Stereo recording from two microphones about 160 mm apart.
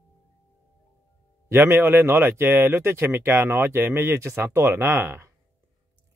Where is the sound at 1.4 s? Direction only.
15° right (ahead or behind).